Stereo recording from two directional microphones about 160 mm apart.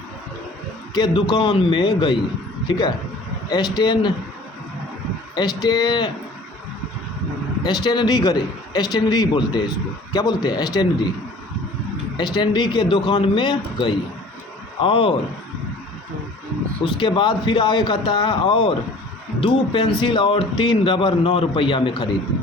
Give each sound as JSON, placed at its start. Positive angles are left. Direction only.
{"t": 0.9, "sound": "a man's voice", "side_deg": 25}
{"t": 5.6, "sound": "a man's voice", "side_deg": 25}
{"t": 7.6, "sound": "a man's voice", "side_deg": 25}
{"t": 12.1, "sound": "a man's voice", "side_deg": 25}
{"t": 16.8, "sound": "speech", "side_deg": 30}